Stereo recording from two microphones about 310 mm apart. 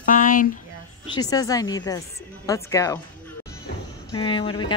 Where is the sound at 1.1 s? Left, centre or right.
Centre.